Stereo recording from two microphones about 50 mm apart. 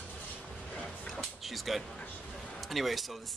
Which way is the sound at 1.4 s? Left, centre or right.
Centre.